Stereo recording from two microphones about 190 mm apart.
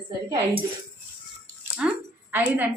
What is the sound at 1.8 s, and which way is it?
Speech, 5° right (ahead or behind).